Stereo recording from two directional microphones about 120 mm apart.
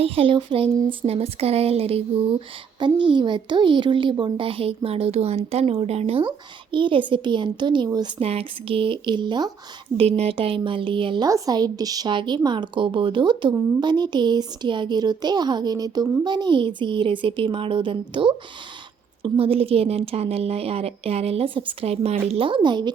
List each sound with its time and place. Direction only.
0.0 s speech: 50° right (ahead or behind)
2.7 s a woman's voice: 40° right (ahead or behind); by 6.2 s 60° right (ahead or behind)
6.2 s a woman's voice: 40° right (ahead or behind)
8.2 s a woman's voice: 55° right (ahead or behind); by 9.5 s 40° right (ahead or behind)
10.0 s a woman's voice: 55° right (ahead or behind)
11.3 s a woman's voice: 30° right (ahead or behind)